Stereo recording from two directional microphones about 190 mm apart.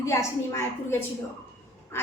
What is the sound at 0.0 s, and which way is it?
A woman's voice, 15° left (ahead or behind).